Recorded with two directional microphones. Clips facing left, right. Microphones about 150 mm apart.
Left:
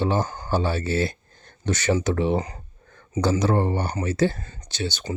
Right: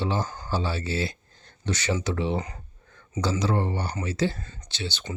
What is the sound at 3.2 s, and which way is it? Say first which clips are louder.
Speech: left 5 dB; 50° left (ahead or behind).